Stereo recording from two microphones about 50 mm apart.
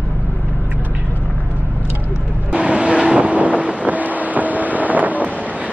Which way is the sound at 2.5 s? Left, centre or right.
Right.